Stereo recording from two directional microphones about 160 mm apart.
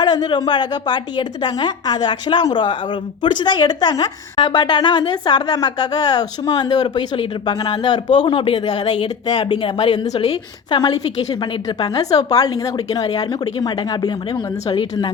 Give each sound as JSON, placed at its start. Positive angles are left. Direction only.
{"t": 0.0, "sound": "a woman's voice", "side_deg": 25}